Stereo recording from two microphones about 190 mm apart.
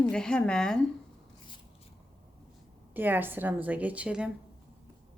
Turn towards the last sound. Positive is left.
turn(degrees=-5)  # may be behind; listen again after turning